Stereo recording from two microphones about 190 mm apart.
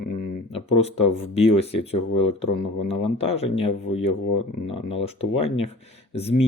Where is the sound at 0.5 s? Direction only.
30° left (ahead or behind).